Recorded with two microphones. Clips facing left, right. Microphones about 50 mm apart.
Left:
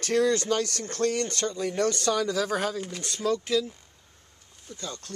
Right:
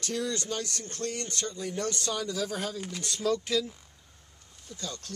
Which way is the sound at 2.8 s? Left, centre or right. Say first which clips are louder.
Left 2 dB; centre.